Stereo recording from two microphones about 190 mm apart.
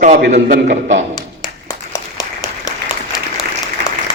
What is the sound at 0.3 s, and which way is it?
Speech, 45° right (ahead or behind).